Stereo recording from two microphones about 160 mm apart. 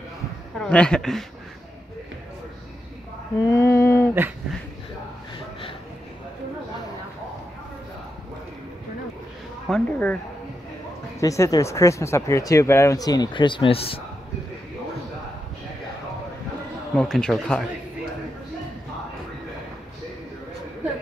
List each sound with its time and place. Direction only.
0.6 s speech: 5° left (ahead or behind)
3.4 s female singing: 15° left (ahead or behind)
9.7 s speech: 5° left (ahead or behind)
11.1 s speech: 20° left (ahead or behind); by 13.9 s 35° left (ahead or behind)
16.9 s speech: 5° left (ahead or behind)